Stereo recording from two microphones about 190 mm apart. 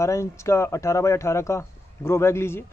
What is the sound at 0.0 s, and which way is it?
A man's voice, 15° left (ahead or behind).